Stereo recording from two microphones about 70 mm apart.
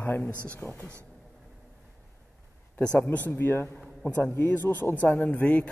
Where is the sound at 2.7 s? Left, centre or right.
Left.